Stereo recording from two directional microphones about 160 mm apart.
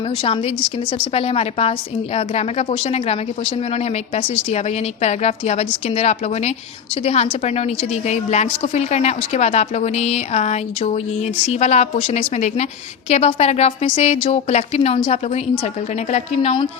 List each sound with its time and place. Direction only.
0.2 s a woman's voice: 35° left (ahead or behind)